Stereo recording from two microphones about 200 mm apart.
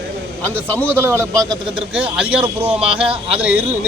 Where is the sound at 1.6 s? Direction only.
25° right (ahead or behind).